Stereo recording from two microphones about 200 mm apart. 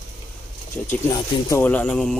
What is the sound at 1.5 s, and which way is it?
Speech, 10° left (ahead or behind).